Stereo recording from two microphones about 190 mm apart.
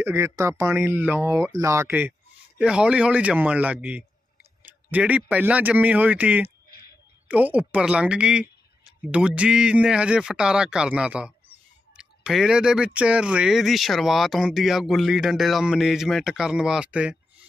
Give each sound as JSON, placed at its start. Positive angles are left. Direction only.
{"t": 0.0, "sound": "speech", "side_deg": -15}